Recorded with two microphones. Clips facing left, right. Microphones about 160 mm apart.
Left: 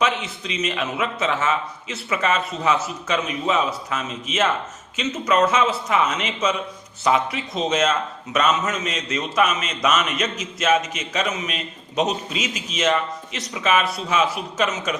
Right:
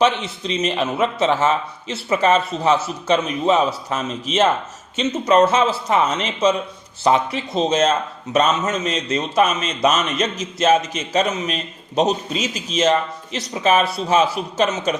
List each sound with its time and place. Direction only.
0.0 s a man's voice: 30° right (ahead or behind)